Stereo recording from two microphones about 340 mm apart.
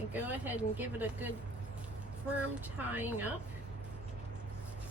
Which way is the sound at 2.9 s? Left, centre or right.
Centre.